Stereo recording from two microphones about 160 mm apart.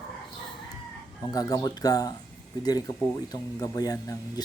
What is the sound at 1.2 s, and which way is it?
Speech, 20° left (ahead or behind).